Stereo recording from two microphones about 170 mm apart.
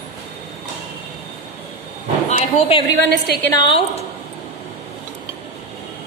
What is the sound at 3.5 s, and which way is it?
Speech, 30° left (ahead or behind).